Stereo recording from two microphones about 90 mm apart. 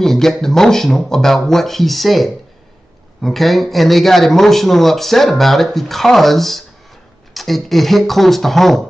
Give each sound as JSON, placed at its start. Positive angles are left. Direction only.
{"t": 0.0, "sound": "speech", "side_deg": 5}